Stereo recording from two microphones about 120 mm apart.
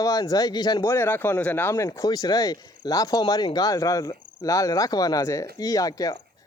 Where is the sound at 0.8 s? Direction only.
20° left (ahead or behind).